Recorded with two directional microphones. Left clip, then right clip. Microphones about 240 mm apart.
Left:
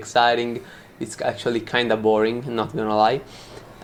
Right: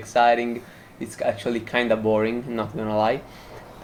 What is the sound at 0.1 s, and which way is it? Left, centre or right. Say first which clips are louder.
Speech: even; left.